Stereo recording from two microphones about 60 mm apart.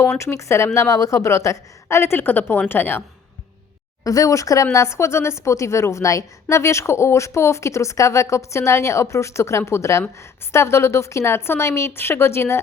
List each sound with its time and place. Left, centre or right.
0.0 s speech: left
4.0 s speech: left